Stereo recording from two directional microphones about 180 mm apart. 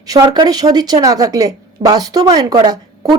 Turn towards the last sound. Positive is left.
turn(degrees=-25)  # may be behind; listen again after turning